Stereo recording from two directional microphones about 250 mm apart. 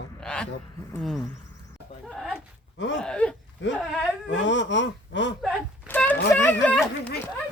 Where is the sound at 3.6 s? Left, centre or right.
Left.